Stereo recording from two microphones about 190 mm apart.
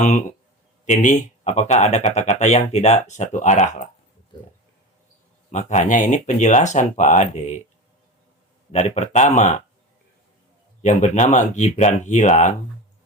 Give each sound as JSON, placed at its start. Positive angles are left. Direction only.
{"t": 0.0, "sound": "speech", "side_deg": 40}
{"t": 4.3, "sound": "speech", "side_deg": 25}
{"t": 5.5, "sound": "speech", "side_deg": 40}
{"t": 8.7, "sound": "speech", "side_deg": 35}
{"t": 10.8, "sound": "speech", "side_deg": 40}